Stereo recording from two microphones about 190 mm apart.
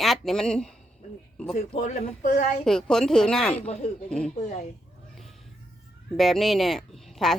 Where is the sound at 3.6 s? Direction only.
35° left (ahead or behind).